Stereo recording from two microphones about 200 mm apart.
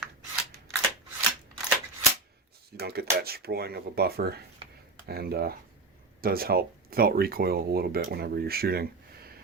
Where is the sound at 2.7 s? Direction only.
50° right (ahead or behind).